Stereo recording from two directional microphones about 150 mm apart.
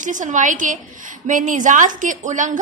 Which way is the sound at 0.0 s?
55° right (ahead or behind).